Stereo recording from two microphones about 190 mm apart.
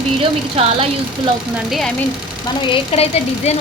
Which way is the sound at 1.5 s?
Centre (ahead or behind).